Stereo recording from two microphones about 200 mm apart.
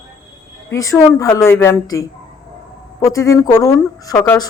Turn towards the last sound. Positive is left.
turn(degrees=10)  # may be behind; listen again after turning